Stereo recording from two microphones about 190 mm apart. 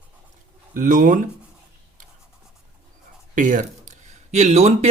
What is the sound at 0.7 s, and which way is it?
Speech, 45° right (ahead or behind).